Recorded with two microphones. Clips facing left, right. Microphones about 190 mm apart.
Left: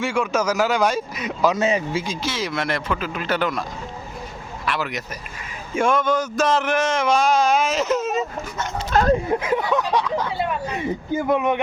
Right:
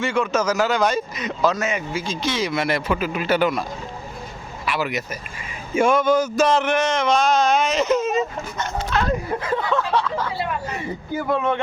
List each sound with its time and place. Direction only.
0.0 s speech: 10° left (ahead or behind)
1.5 s speech: 30° left (ahead or behind)
2.0 s a man's voice: 5° left (ahead or behind)
4.6 s a man's voice: 5° right (ahead or behind)
8.9 s speech: 45° left (ahead or behind)
9.4 s a sound: 15° left (ahead or behind)
11.2 s speech: 15° left (ahead or behind)